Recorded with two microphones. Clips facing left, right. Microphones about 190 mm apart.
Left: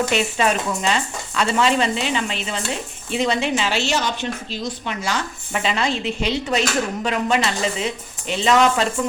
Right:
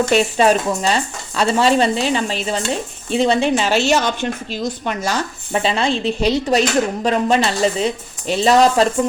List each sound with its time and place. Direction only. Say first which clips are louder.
0.1 s a woman's voice: right 6 dB; 35° right (ahead or behind)